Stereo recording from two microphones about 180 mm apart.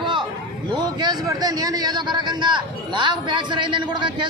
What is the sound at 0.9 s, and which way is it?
Speech, 20° right (ahead or behind).